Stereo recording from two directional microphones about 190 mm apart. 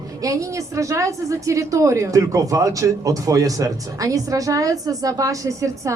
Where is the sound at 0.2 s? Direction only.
15° right (ahead or behind).